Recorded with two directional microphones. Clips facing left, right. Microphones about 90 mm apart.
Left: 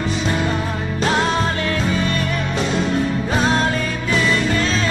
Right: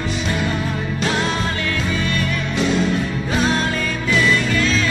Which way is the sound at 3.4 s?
35° left (ahead or behind).